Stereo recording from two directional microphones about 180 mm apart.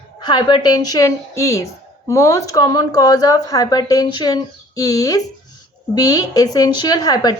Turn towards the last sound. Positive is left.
turn(degrees=20)  # may be behind; listen again after turning